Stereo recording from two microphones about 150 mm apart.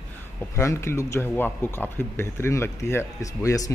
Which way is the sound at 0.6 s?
20° left (ahead or behind).